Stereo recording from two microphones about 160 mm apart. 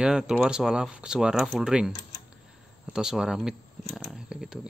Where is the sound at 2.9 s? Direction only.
5° right (ahead or behind).